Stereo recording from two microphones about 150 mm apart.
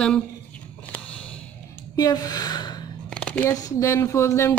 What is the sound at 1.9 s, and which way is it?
Gasp, 25° left (ahead or behind).